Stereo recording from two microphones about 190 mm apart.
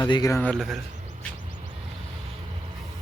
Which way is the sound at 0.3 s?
5° left (ahead or behind).